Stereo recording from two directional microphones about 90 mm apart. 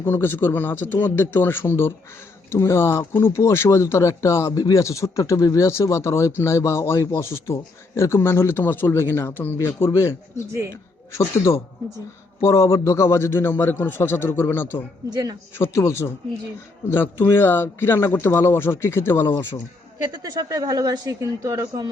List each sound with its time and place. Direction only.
0.0 s a man's voice: 25° left (ahead or behind)
15.1 s speech: 45° right (ahead or behind)
15.5 s a man's voice: 30° left (ahead or behind)
20.1 s speech: 50° right (ahead or behind)